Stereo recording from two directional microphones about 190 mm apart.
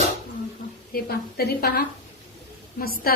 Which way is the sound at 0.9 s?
55° left (ahead or behind).